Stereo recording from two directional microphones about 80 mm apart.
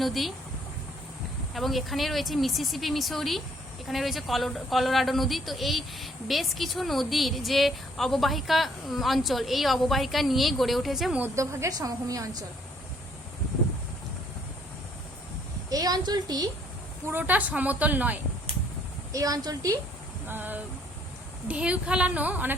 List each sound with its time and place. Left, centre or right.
0.0 s a man's voice: centre
1.5 s a man's voice: centre
11.3 s a woman's voice: right
15.7 s a woman's voice: right
17.0 s a woman's voice: right
19.1 s a woman's voice: right
20.2 s a woman's voice: right